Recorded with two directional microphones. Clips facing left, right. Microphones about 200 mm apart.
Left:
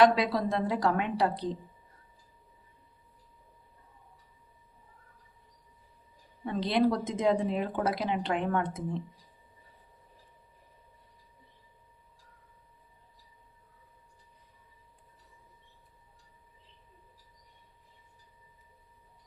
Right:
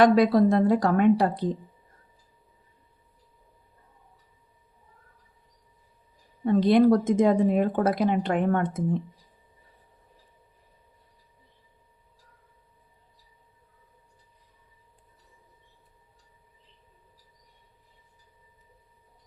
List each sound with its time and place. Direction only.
0.0 s speech: 50° right (ahead or behind)
6.4 s speech: 50° right (ahead or behind)